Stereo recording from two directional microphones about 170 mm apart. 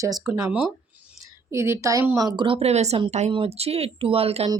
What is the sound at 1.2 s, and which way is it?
A woman's voice, 15° right (ahead or behind).